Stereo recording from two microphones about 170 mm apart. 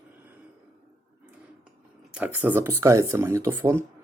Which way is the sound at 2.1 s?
10° right (ahead or behind).